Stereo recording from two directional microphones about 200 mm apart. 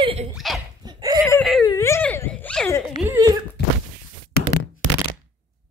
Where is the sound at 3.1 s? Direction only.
15° right (ahead or behind).